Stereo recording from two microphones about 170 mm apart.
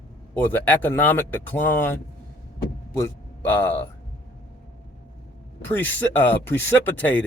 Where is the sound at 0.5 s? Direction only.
10° left (ahead or behind).